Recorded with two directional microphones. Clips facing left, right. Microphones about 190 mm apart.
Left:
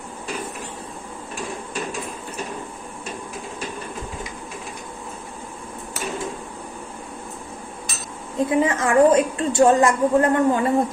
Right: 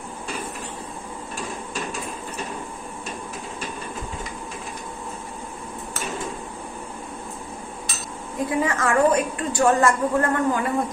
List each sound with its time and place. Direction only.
8.5 s a woman's voice: 20° left (ahead or behind)